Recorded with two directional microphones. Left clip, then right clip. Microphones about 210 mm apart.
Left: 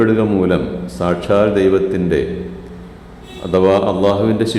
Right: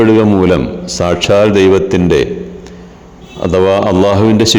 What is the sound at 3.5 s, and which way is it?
A man's voice, 35° right (ahead or behind).